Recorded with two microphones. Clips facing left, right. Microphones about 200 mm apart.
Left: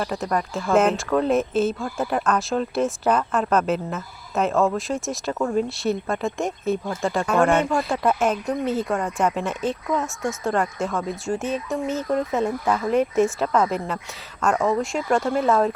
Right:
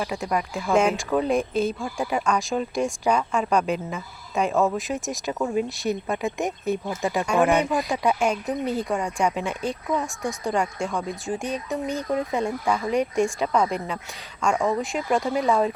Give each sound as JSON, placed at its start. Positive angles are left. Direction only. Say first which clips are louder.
{"t": 0.0, "sound": "speech", "louder": "left 2 dB", "side_deg": -5}
{"t": 0.3, "sound": "speech", "louder": "left 1 dB", "side_deg": -15}
{"t": 0.9, "sound": "speech", "louder": "left 2 dB", "side_deg": 0}
{"t": 5.1, "sound": "speech", "louder": "left 2 dB", "side_deg": -15}
{"t": 7.9, "sound": "speech", "louder": "left 1 dB", "side_deg": 0}